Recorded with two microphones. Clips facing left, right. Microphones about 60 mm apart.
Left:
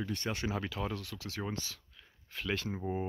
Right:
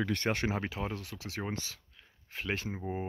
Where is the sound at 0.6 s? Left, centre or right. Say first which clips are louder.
Right 1 dB; centre.